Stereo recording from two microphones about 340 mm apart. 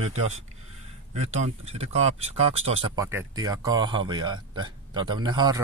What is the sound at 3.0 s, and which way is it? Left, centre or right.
Speech, centre.